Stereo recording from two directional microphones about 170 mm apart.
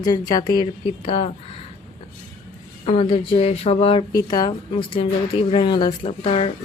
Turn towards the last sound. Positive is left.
turn(degrees=35)  # may be behind; listen again after turning